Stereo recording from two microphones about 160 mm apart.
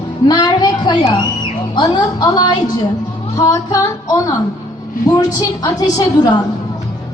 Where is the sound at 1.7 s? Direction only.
25° left (ahead or behind).